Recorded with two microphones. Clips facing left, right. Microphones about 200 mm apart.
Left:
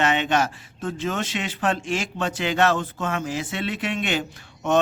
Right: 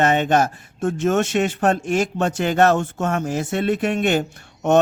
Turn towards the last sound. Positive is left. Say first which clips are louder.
# right 5 dB
turn(degrees=-45)  # may be behind; listen again after turning